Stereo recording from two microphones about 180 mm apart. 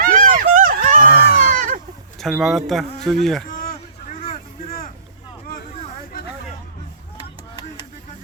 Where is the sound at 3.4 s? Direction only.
50° left (ahead or behind).